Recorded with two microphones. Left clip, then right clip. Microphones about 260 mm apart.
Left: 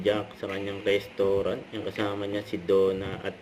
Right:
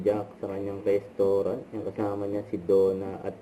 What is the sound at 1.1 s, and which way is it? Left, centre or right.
Speech, left.